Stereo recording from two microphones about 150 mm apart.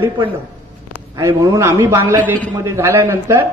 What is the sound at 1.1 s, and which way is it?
A man's voice, 25° right (ahead or behind).